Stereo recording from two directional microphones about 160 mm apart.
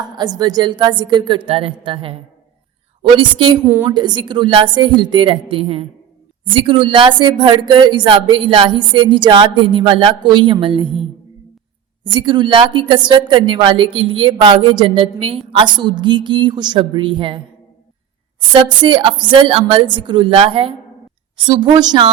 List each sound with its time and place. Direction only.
0.0 s a woman's voice: 25° right (ahead or behind)
3.6 s a woman's voice: 10° right (ahead or behind)
3.8 s a woman's voice: 30° right (ahead or behind)
12.1 s a woman's voice: 30° right (ahead or behind)